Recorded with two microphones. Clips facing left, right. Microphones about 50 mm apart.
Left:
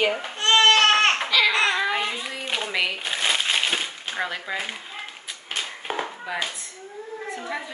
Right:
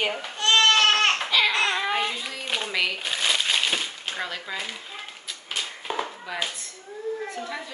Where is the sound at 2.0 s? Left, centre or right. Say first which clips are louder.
Even; centre.